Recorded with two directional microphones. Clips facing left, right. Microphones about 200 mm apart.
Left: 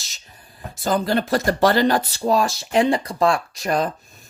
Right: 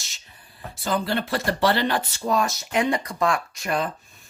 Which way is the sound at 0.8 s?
45° left (ahead or behind).